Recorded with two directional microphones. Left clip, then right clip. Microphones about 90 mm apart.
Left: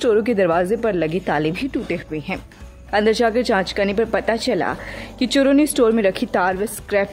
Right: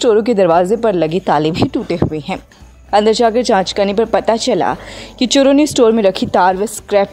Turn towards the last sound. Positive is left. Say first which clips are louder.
# right 6 dB
turn(degrees=-55)  # may be behind; listen again after turning